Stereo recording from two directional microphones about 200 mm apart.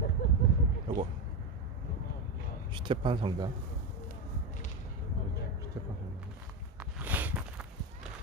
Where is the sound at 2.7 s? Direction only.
25° right (ahead or behind).